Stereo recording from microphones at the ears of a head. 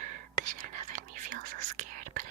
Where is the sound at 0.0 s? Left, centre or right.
Right.